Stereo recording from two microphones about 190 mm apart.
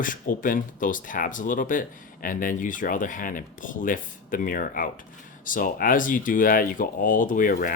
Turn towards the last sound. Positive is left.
turn(degrees=45)  # may be behind; listen again after turning